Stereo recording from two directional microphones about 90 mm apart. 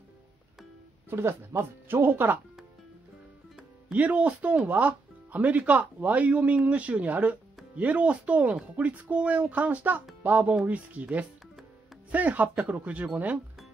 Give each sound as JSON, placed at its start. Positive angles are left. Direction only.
{"t": 1.1, "sound": "speech", "side_deg": -25}
{"t": 3.9, "sound": "speech", "side_deg": -15}